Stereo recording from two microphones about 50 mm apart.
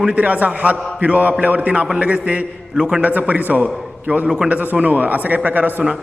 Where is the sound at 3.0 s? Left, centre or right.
Right.